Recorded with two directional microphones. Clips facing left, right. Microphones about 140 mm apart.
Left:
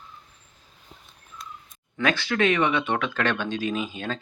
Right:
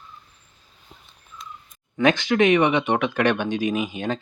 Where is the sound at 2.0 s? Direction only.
20° right (ahead or behind).